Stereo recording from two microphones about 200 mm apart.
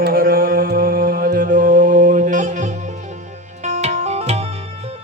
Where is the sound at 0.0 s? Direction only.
45° right (ahead or behind).